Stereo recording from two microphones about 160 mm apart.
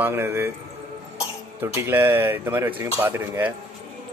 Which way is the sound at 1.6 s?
15° right (ahead or behind).